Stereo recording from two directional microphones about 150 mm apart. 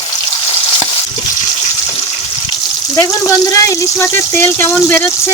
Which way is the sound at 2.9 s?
15° left (ahead or behind).